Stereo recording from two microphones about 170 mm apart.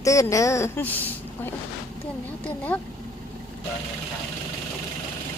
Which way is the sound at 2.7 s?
10° left (ahead or behind).